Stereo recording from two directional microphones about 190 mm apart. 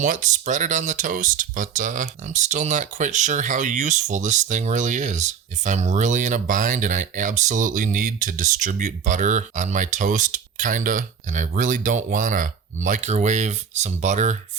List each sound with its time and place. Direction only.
0.0 s speech: 40° right (ahead or behind)